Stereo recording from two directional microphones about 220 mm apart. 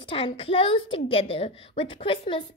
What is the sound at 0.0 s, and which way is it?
A woman's voice, 25° left (ahead or behind).